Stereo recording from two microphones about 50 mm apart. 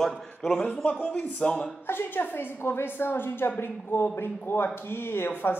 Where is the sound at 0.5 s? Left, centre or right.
Centre.